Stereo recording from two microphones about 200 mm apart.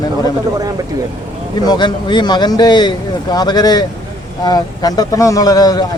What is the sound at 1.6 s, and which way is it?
Speech, 20° left (ahead or behind).